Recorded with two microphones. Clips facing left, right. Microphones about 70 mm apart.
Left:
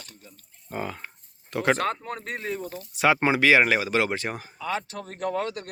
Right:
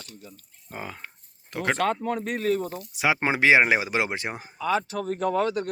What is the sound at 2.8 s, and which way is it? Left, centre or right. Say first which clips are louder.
Speech: left 7 dB; centre.